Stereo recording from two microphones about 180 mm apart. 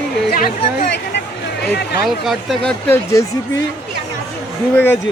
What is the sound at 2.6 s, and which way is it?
Speech, 15° left (ahead or behind).